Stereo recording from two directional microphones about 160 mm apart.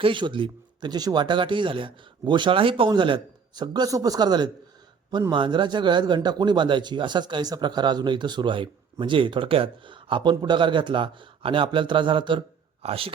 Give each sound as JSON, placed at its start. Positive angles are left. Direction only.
{"t": 0.0, "sound": "a man's voice", "side_deg": -30}